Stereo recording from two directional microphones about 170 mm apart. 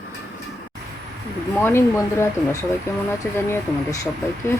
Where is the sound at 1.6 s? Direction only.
15° left (ahead or behind).